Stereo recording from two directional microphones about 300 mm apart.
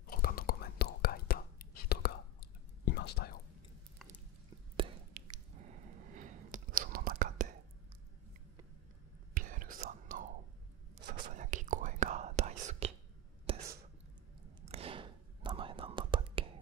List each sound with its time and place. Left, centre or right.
0.0 s whispering: left
5.2 s squish: right
6.1 s whispering: right
9.3 s whispering: right